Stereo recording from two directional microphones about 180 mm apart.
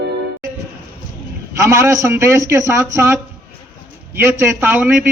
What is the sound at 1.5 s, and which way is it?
Speech, 15° right (ahead or behind).